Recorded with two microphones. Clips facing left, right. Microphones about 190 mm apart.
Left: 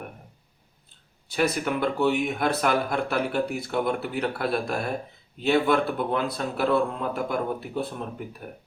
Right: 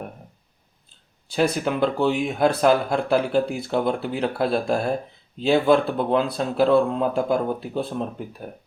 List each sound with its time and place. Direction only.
1.4 s speech: 30° right (ahead or behind)